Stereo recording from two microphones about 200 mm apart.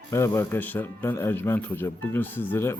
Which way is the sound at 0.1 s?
15° left (ahead or behind).